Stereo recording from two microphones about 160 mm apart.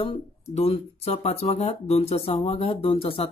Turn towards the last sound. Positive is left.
turn(degrees=35)  # may be behind; listen again after turning